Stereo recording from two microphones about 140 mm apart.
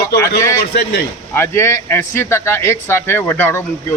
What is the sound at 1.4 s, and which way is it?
Speech, 20° left (ahead or behind).